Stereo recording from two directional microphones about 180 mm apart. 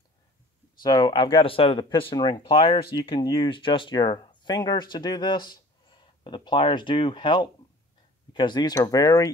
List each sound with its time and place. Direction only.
0.8 s speech: 25° left (ahead or behind)